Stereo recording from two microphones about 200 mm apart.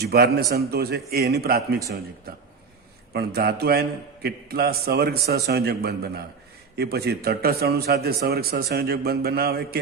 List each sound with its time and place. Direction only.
0.0 s a man's voice: 50° right (ahead or behind)
3.1 s a man's voice: 55° right (ahead or behind)